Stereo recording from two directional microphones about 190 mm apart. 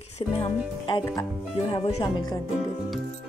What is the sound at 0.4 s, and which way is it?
Speech, 25° left (ahead or behind).